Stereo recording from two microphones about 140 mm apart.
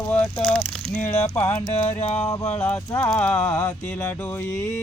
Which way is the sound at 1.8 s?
15° left (ahead or behind).